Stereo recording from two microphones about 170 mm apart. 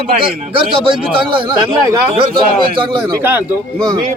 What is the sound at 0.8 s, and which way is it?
A man's voice, 30° right (ahead or behind).